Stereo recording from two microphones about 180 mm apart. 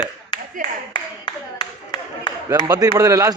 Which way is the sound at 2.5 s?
20° right (ahead or behind).